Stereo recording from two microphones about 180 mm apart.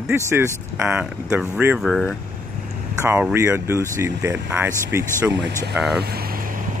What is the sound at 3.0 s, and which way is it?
Speech, 10° right (ahead or behind).